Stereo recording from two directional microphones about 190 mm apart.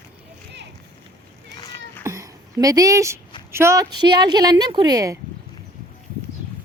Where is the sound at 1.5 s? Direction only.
25° left (ahead or behind).